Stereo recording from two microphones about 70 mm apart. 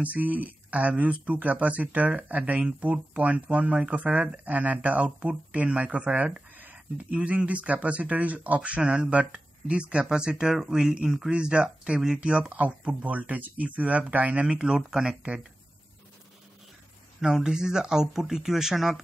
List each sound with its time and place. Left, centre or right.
0.0 s speech: right
17.2 s speech: centre